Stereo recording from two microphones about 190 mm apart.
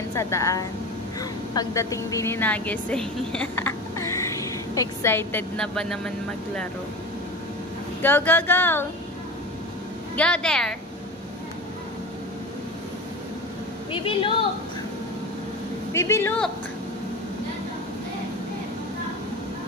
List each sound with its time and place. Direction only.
0.1 s a woman's voice: 15° left (ahead or behind)
8.0 s a woman's voice: 10° left (ahead or behind)
10.1 s speech: 5° left (ahead or behind)
13.9 s a woman's voice: 25° left (ahead or behind)
15.9 s a woman's voice: 15° left (ahead or behind)